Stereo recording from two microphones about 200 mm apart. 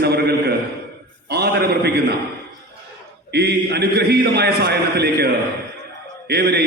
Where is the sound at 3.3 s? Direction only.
55° right (ahead or behind).